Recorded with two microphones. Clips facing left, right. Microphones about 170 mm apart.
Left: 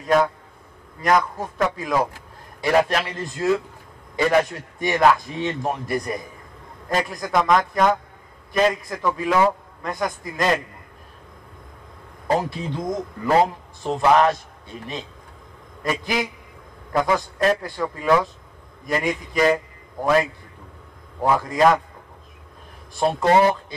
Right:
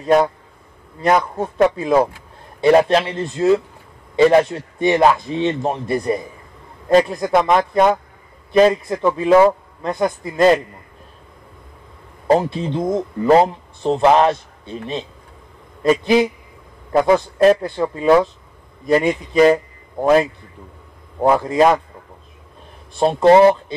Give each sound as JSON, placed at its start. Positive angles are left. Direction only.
{"t": 0.0, "sound": "a man's voice", "side_deg": -30}
{"t": 12.4, "sound": "a man's voice", "side_deg": -25}
{"t": 22.9, "sound": "a man's voice", "side_deg": -25}